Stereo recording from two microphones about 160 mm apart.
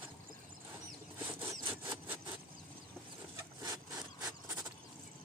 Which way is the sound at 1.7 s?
10° right (ahead or behind).